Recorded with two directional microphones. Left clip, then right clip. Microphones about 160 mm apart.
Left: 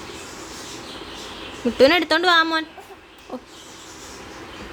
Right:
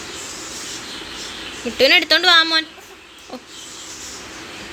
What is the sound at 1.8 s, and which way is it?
Speech, 30° left (ahead or behind).